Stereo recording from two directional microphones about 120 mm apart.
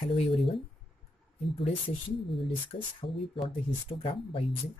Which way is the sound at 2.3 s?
50° left (ahead or behind).